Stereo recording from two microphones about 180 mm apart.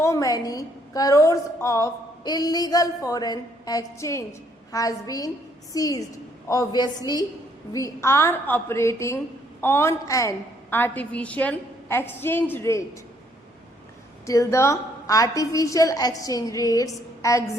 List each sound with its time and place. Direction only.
0.0 s a woman's voice: 15° left (ahead or behind)
14.3 s a woman's voice: 15° left (ahead or behind)